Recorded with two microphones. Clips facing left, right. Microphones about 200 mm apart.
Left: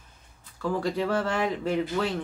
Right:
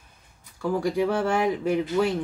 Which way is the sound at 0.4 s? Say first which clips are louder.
Right 2 dB; 15° right (ahead or behind).